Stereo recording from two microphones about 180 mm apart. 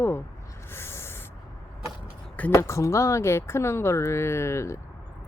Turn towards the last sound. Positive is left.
turn(degrees=15)  # may be behind; listen again after turning